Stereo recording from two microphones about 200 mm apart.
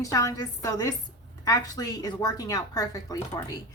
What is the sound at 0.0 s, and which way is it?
Speech, 15° left (ahead or behind).